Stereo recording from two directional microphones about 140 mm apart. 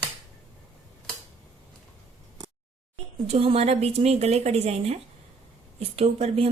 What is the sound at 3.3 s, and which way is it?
Speech, 45° right (ahead or behind).